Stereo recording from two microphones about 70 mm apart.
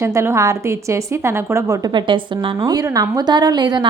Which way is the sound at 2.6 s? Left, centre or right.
Right.